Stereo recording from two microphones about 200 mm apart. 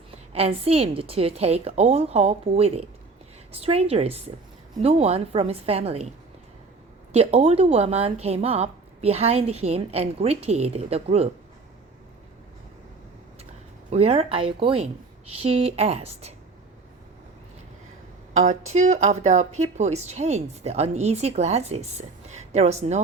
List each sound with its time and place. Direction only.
0.3 s a woman's voice: 30° right (ahead or behind)
7.1 s a woman's voice: 30° right (ahead or behind)
13.9 s speech: 30° right (ahead or behind)
18.3 s a woman's voice: 35° right (ahead or behind)